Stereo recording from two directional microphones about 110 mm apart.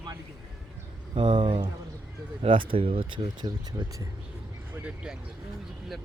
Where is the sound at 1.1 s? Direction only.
50° right (ahead or behind).